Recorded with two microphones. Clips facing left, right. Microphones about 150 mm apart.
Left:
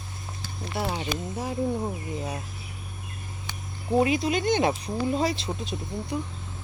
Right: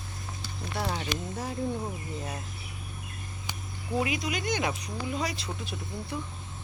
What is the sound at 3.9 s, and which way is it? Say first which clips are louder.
Speech: left 7 dB; 30° left (ahead or behind).